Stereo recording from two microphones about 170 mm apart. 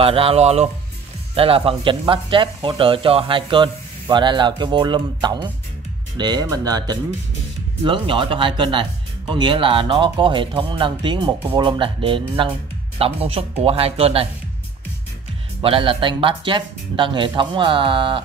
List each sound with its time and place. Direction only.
0.0 s speech: 35° right (ahead or behind)
15.6 s speech: 30° right (ahead or behind)